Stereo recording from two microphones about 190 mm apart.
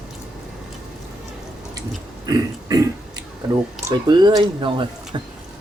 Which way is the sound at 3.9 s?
25° right (ahead or behind).